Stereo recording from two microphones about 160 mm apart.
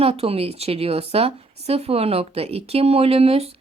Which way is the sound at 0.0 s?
40° right (ahead or behind).